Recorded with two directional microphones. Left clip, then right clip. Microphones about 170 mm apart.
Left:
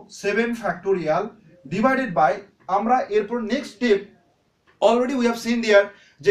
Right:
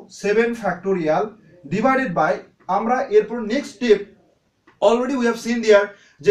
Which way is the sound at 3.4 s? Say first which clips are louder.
Right 3 dB; 30° left (ahead or behind).